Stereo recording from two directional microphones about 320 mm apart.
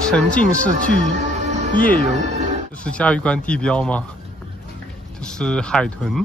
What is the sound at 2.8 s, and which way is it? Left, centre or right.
Speech, centre.